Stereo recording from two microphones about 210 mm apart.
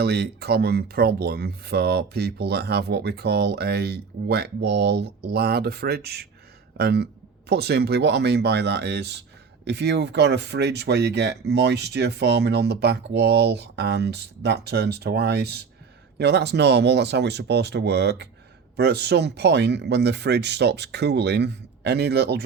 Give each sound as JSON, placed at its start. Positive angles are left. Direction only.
{"t": 0.0, "sound": "speech", "side_deg": -50}